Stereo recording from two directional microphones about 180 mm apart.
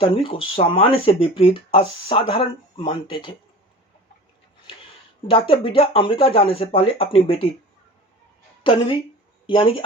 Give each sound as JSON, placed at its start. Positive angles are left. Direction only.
{"t": 0.0, "sound": "speech", "side_deg": 30}
{"t": 5.3, "sound": "speech", "side_deg": 30}
{"t": 9.5, "sound": "speech", "side_deg": 30}